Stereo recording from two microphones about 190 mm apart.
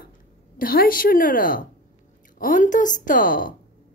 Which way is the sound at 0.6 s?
50° left (ahead or behind).